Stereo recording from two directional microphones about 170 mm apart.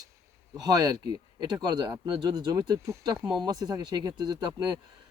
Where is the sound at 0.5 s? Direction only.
20° right (ahead or behind).